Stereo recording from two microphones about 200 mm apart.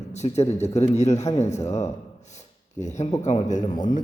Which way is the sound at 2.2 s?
35° left (ahead or behind).